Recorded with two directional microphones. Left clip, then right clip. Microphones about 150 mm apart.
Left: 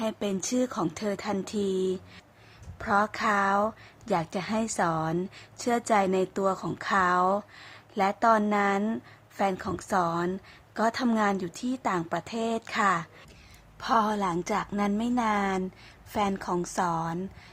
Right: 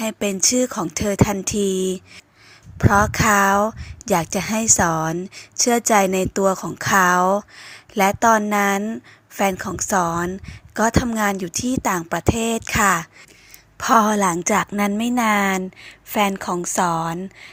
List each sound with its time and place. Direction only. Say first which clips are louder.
0.0 s a woman's voice: right 9 dB; 20° right (ahead or behind)